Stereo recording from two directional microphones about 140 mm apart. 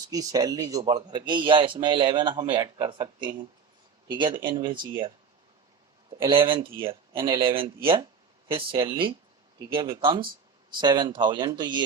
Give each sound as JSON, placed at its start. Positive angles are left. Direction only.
{"t": 0.1, "sound": "a man's voice", "side_deg": -25}
{"t": 7.1, "sound": "speech", "side_deg": -20}
{"t": 7.4, "sound": "a man's voice", "side_deg": -40}